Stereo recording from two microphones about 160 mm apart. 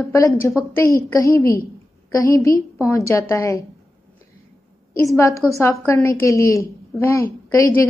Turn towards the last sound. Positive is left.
turn(degrees=15)  # may be behind; listen again after turning